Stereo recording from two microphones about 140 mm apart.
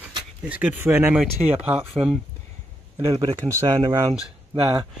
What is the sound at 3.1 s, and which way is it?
Speech, 40° right (ahead or behind).